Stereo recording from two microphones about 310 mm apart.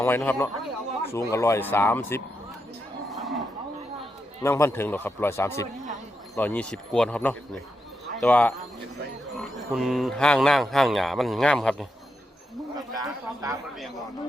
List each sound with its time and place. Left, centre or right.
0.0 s speech: centre
3.1 s cattle: centre
4.4 s speech: centre
12.9 s speech: centre